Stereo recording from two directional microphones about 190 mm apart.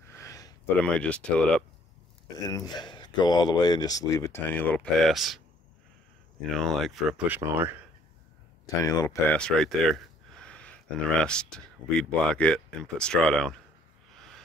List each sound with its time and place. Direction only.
0.1 s a sound: 15° left (ahead or behind)
0.9 s speech: 5° left (ahead or behind)
2.4 s speech: 20° left (ahead or behind)
4.5 s speech: 10° left (ahead or behind)
6.5 s speech: centre (ahead or behind)
7.2 s speech: 10° right (ahead or behind)
8.8 s speech: 20° left (ahead or behind)
9.4 s speech: centre (ahead or behind)
14.1 s a sound: 5° left (ahead or behind)